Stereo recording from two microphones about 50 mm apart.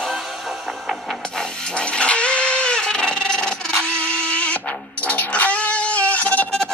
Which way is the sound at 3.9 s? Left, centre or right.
Left.